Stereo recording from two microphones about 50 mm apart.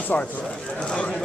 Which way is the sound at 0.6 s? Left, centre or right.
Centre.